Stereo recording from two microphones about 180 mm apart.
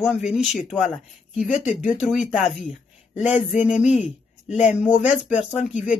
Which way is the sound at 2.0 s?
5° right (ahead or behind).